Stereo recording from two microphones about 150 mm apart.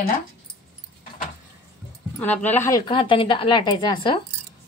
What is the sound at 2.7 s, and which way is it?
A woman's voice, 30° left (ahead or behind).